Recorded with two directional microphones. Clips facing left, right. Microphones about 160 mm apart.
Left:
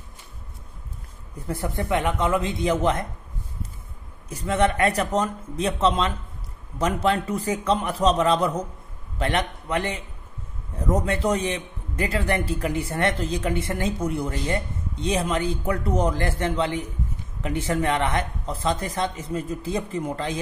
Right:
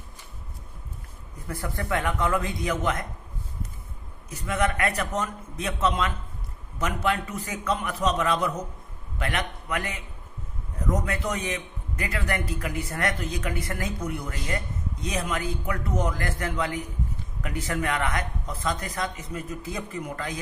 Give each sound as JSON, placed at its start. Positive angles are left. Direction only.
{"t": 1.5, "sound": "a man's voice", "side_deg": 25}
{"t": 4.3, "sound": "a man's voice", "side_deg": 30}